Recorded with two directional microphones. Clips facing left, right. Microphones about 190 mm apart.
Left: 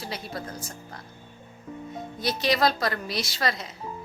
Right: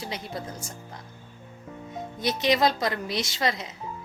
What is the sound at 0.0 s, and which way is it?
Speech, 20° right (ahead or behind).